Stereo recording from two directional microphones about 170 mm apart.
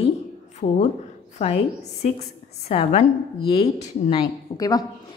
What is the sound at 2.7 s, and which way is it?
Speech, 40° left (ahead or behind).